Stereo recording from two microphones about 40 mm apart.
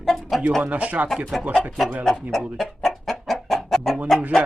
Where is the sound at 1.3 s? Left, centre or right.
Centre.